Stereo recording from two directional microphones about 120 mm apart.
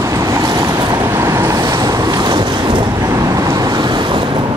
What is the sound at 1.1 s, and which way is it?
Vehicle, 25° right (ahead or behind).